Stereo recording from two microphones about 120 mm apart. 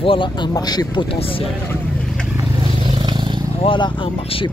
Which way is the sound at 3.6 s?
45° left (ahead or behind).